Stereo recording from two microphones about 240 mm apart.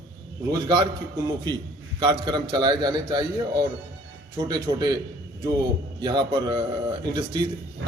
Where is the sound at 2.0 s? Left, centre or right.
Centre.